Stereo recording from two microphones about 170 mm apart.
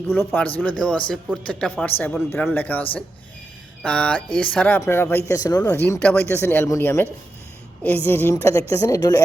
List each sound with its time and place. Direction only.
0.3 s speech: 10° left (ahead or behind)
3.8 s speech: 5° left (ahead or behind); by 9.2 s 20° left (ahead or behind)